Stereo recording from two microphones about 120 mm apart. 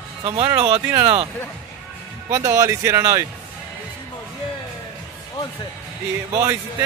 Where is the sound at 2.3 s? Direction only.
30° right (ahead or behind).